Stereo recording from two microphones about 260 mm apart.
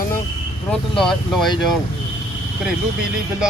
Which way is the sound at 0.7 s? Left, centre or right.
Centre.